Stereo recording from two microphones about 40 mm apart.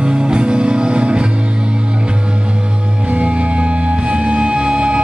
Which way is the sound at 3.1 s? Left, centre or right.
Right.